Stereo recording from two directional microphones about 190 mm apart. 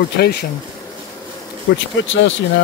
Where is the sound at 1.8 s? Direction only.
80° left.